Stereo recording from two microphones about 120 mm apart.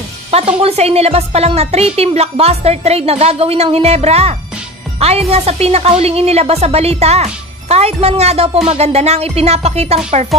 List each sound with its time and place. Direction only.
0.3 s a woman's voice: 55° right (ahead or behind)